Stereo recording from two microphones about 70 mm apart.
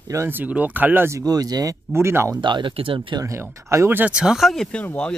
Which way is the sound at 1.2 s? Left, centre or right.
Right.